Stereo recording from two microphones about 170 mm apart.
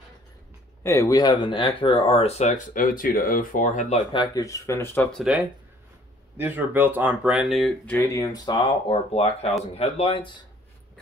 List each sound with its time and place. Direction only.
0.8 s speech: 20° left (ahead or behind); by 4.0 s 50° left (ahead or behind)
4.1 s speech: 25° left (ahead or behind)
6.3 s speech: 10° right (ahead or behind); by 10.3 s 35° left (ahead or behind)